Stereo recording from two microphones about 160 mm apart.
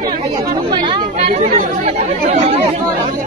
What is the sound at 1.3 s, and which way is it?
Speech, 45° right (ahead or behind).